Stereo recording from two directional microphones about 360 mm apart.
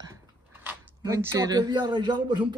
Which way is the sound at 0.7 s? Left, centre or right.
Centre.